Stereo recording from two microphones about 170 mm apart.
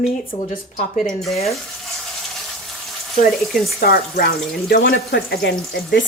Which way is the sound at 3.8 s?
60° left (ahead or behind).